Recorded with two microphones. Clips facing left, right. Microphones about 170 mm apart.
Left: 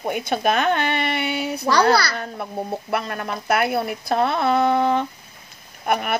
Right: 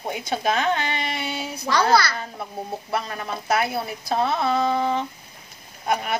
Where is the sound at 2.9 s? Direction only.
60° left (ahead or behind).